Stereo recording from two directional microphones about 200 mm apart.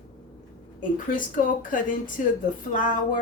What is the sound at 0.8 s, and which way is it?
Speech, 40° left (ahead or behind).